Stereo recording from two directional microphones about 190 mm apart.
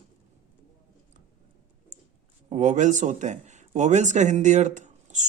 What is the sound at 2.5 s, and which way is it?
Speech, 40° right (ahead or behind).